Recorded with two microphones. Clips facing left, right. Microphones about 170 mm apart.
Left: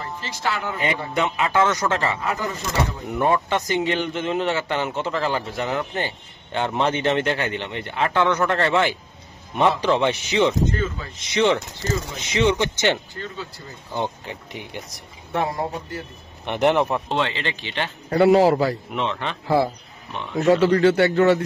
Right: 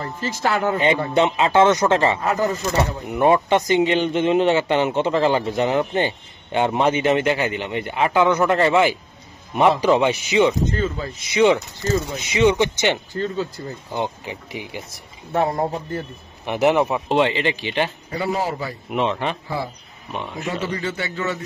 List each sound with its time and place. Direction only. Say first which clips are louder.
0.0 s speech: right 4 dB; 45° right (ahead or behind)
1.1 s speech: right 3 dB; 25° right (ahead or behind)
2.2 s speech: right 6 dB; 45° right (ahead or behind)
3.1 s speech: right 5 dB; 15° right (ahead or behind)
10.7 s speech: right 2 dB; 30° right (ahead or behind)
11.1 s speech: right 3 dB; 10° right (ahead or behind)
13.1 s speech: right 9 dB; 40° right (ahead or behind)
13.9 s speech: even; 10° right (ahead or behind)
15.3 s speech: right 4 dB; 30° right (ahead or behind)
16.4 s a man's voice: right 1 dB; 5° right (ahead or behind)
17.2 s speech: right 6 dB; 15° right (ahead or behind)
18.1 s a man's voice: left 11 dB; 75° left (ahead or behind)
18.9 s speech: right 4 dB; 10° right (ahead or behind)
19.4 s a man's voice: left 8 dB; 75° left (ahead or behind)